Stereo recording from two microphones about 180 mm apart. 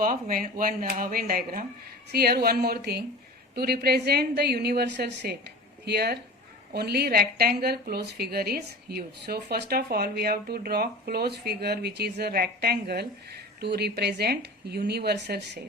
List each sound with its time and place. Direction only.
0.0 s a woman's voice: 50° right (ahead or behind); by 15.5 s 65° right (ahead or behind)